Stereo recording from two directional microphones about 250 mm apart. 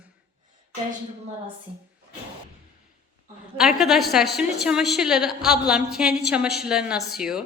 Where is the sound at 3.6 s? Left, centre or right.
Centre.